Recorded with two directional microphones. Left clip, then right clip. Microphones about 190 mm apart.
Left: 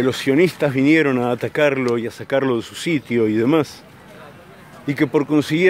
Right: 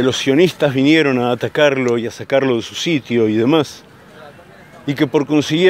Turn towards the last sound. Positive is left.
turn(degrees=-10)  # may be behind; listen again after turning